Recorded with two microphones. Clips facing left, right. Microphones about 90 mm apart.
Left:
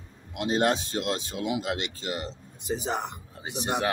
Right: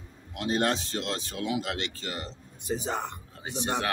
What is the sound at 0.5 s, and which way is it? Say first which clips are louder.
Speech: left 2 dB; 15° left (ahead or behind).